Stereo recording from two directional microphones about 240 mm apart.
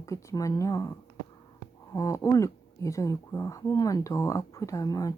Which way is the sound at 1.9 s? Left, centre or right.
Centre.